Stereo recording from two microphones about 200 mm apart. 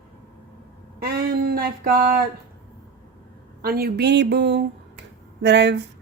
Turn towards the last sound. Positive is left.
turn(degrees=-60)  # may be behind; listen again after turning